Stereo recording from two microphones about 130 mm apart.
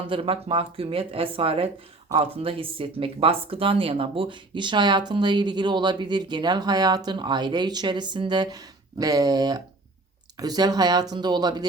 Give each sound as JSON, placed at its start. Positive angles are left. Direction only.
{"t": 0.1, "sound": "speech", "side_deg": -45}